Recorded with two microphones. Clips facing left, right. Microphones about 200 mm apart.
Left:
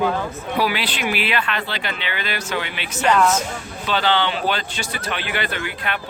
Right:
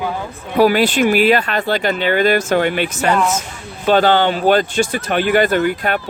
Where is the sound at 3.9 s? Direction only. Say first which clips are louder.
Right 8 dB; 45° right (ahead or behind).